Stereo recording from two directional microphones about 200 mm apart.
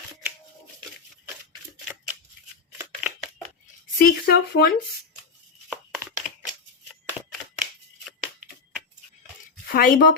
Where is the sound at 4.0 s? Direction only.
50° left (ahead or behind).